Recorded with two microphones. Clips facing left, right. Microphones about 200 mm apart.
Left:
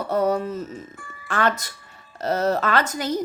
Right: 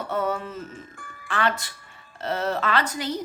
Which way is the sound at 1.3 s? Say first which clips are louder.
Left 3 dB; 45° left (ahead or behind).